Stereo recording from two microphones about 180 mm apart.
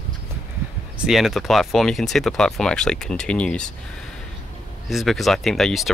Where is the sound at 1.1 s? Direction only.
Centre (ahead or behind).